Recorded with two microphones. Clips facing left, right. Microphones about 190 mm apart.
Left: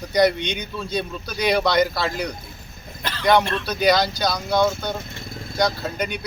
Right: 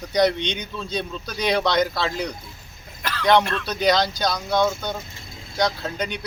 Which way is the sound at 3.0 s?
25° left (ahead or behind).